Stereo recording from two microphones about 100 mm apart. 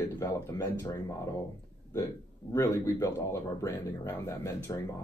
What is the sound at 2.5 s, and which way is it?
Speech, 25° left (ahead or behind).